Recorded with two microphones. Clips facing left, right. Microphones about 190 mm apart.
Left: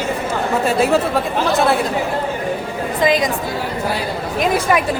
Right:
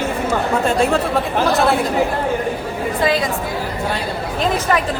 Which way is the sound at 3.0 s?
15° left (ahead or behind).